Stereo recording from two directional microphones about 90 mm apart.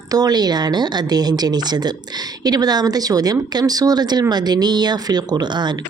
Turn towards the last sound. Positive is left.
turn(degrees=-55)  # may be behind; listen again after turning